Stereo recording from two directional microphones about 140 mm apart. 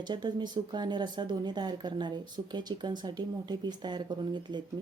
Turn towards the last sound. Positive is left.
turn(degrees=-35)  # may be behind; listen again after turning